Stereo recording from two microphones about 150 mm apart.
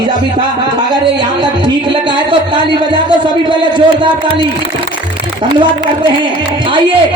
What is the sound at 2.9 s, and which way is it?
Speech, 30° right (ahead or behind).